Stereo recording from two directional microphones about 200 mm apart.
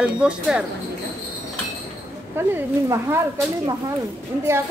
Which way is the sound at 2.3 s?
10° right (ahead or behind).